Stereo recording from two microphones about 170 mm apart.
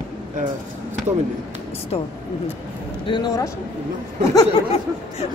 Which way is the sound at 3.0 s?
25° left (ahead or behind).